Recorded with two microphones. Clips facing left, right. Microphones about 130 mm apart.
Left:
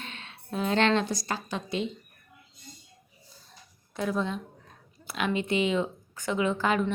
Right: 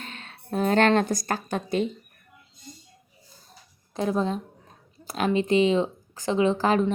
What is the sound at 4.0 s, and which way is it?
A woman's voice, 35° right (ahead or behind).